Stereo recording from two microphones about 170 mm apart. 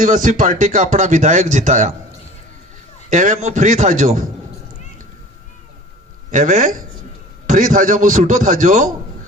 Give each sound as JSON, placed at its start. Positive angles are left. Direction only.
{"t": 0.0, "sound": "speech", "side_deg": -50}
{"t": 3.1, "sound": "speech", "side_deg": -45}
{"t": 6.3, "sound": "speech", "side_deg": -50}